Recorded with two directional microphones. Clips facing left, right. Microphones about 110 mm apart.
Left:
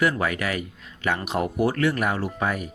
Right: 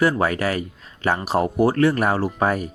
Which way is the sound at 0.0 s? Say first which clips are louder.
Right 4 dB; 30° right (ahead or behind).